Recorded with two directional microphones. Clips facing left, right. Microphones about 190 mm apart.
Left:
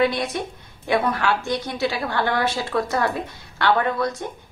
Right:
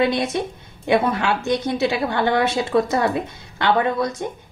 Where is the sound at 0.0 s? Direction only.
25° right (ahead or behind).